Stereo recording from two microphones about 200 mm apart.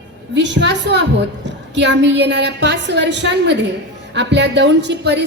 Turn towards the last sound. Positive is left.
turn(degrees=-60)  # may be behind; listen again after turning